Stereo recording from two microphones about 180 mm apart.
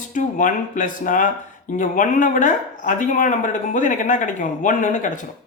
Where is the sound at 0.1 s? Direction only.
45° left (ahead or behind).